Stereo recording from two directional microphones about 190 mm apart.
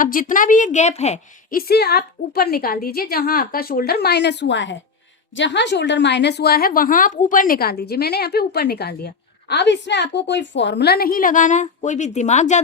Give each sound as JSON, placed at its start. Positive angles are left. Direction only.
{"t": 0.0, "sound": "a woman's voice", "side_deg": 45}
{"t": 1.5, "sound": "a woman's voice", "side_deg": 55}